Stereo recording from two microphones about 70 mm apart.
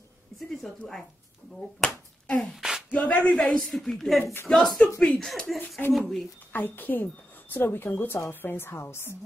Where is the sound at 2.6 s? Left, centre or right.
Centre.